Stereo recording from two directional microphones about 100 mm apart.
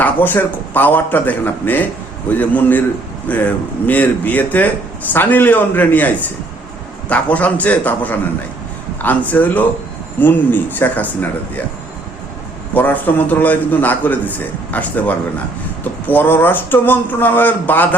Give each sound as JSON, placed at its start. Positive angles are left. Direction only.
{"t": 0.0, "sound": "a man's voice", "side_deg": 20}
{"t": 12.7, "sound": "a man's voice", "side_deg": 15}